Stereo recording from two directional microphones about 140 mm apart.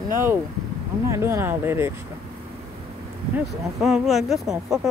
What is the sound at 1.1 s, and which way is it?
Speech, 20° right (ahead or behind).